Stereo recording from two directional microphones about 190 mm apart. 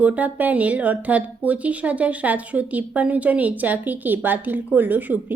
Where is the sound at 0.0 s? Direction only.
10° right (ahead or behind).